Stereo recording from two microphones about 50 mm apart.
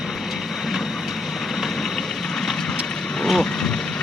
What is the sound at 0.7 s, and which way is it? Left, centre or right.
Vehicle, centre.